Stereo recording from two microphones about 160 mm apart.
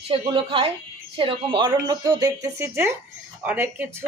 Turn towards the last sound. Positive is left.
turn(degrees=-15)  # may be behind; listen again after turning